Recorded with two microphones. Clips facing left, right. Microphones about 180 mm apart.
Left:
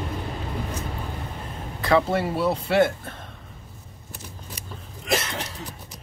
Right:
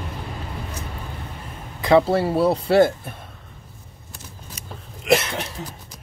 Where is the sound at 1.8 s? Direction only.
20° right (ahead or behind).